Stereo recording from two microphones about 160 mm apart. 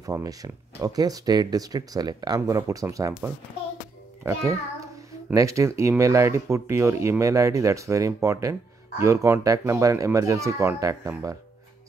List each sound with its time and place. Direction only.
0.0 s speech: 20° right (ahead or behind)
4.2 s a child's voice: 15° right (ahead or behind)